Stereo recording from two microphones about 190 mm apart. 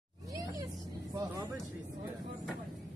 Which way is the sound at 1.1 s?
10° right (ahead or behind).